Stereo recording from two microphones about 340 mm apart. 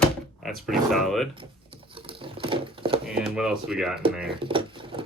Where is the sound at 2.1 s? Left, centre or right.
Centre.